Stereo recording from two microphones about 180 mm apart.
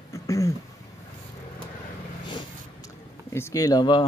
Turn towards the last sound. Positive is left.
turn(degrees=25)  # may be behind; listen again after turning